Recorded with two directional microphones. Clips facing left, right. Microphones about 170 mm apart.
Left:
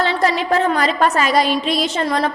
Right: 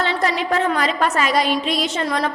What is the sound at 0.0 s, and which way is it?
A woman's voice, 35° left (ahead or behind).